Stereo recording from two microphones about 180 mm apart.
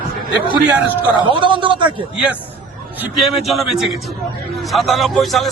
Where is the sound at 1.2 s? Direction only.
25° right (ahead or behind).